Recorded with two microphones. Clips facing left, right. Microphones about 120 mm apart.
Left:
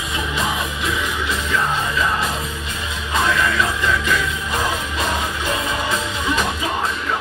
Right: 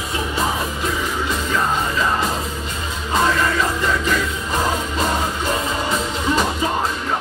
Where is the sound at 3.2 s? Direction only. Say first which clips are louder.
Right 1 dB; 40° right (ahead or behind).